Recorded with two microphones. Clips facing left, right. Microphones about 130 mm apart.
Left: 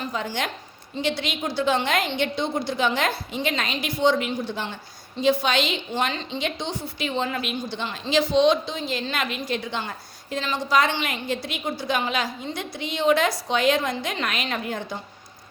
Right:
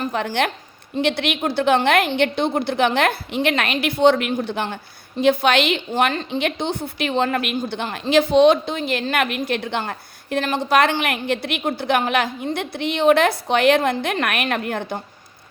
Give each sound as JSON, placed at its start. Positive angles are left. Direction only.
{"t": 0.0, "sound": "a woman's voice", "side_deg": -55}
{"t": 5.9, "sound": "a woman's voice", "side_deg": -50}